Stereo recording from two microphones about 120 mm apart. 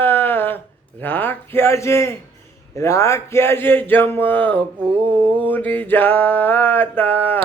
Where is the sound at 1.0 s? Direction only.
15° left (ahead or behind).